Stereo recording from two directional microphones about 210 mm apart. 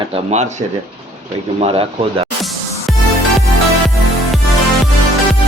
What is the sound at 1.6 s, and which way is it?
Speech, 25° right (ahead or behind).